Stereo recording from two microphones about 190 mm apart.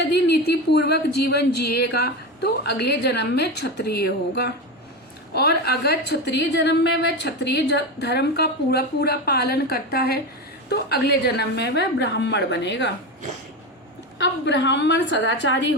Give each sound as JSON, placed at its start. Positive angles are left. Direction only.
{"t": 0.0, "sound": "a woman's voice", "side_deg": 60}
{"t": 14.2, "sound": "a woman's voice", "side_deg": 65}